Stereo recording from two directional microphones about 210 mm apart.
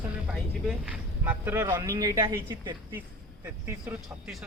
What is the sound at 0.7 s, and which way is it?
A woman's voice, 5° right (ahead or behind).